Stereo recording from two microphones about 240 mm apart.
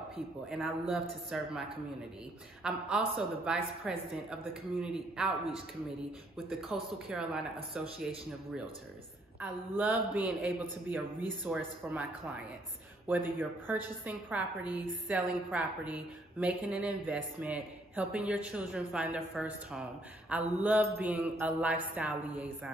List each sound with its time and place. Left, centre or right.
0.5 s a woman's voice: centre
2.6 s a woman's voice: centre
6.3 s a woman's voice: centre
9.4 s a woman's voice: centre